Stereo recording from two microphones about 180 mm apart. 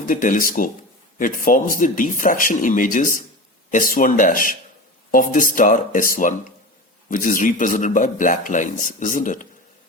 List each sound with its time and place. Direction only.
0.1 s a man's voice: 50° left (ahead or behind)